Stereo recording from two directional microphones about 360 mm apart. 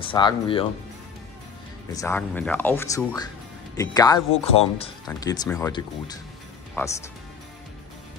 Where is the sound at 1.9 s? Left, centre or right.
Centre.